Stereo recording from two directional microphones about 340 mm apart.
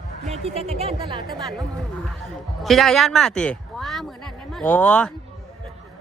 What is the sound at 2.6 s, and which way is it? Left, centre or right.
Speech, centre.